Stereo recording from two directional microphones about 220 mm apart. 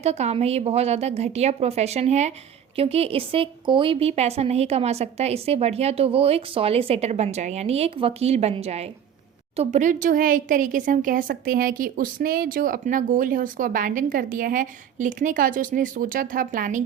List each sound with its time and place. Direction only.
0.0 s a woman's voice: 30° right (ahead or behind)